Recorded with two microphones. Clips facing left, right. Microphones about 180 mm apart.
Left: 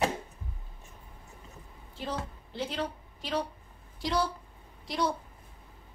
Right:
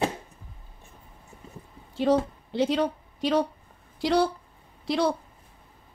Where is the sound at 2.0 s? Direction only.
80° right.